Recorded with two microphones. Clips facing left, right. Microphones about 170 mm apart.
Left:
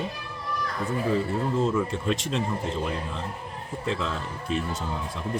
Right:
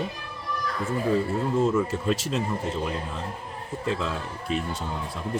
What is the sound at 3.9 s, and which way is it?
Speech, 5° right (ahead or behind).